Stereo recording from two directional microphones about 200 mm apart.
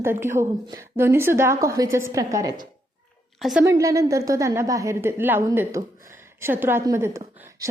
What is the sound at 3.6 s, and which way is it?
A woman's voice, 15° right (ahead or behind).